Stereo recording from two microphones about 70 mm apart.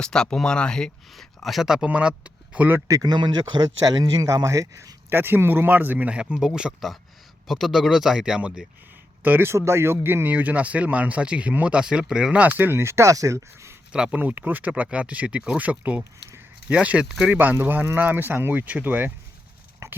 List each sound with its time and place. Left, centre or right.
0.0 s speech: centre
2.8 s speech: right
3.1 s speech: right
5.0 s speech: right; by 6.7 s centre
7.4 s speech: centre
9.2 s speech: right
9.5 s speech: right; by 12.4 s centre
12.4 s speech: right
13.9 s speech: centre
14.2 s speech: right
17.3 s speech: right
19.8 s a sound: right